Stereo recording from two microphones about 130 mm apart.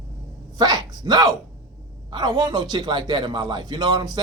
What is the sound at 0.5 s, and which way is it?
A man's voice, 30° right (ahead or behind).